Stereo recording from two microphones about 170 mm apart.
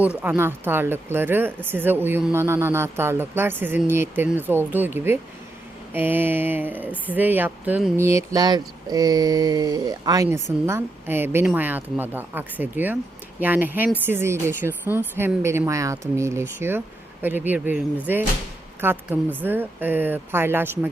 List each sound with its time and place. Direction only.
0.2 s speech: 10° right (ahead or behind)
7.9 s mantra: 15° right (ahead or behind)
10.7 s speech: 15° right (ahead or behind)